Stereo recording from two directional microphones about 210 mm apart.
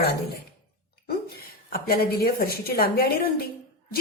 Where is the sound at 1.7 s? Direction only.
45° left (ahead or behind).